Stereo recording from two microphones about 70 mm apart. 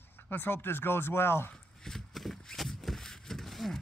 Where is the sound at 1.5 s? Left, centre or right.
Centre.